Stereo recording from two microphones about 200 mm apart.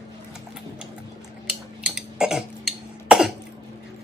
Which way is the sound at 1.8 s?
5° right (ahead or behind).